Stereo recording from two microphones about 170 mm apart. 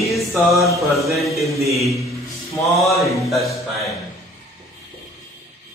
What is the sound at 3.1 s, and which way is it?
Music, centre (ahead or behind).